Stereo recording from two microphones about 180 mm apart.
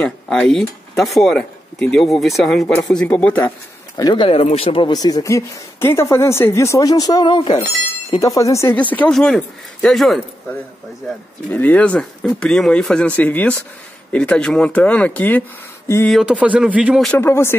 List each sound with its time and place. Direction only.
0.0 s speech: 5° left (ahead or behind)
2.6 s speech: 15° left (ahead or behind)
2.9 s speech: 5° left (ahead or behind)
3.9 s speech: 25° left (ahead or behind); by 10.2 s centre (ahead or behind)
11.5 s speech: 10° left (ahead or behind)
16.1 s speech: 5° right (ahead or behind)
17.2 s speech: 15° left (ahead or behind)